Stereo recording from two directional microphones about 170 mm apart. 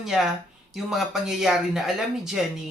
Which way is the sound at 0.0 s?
Centre (ahead or behind).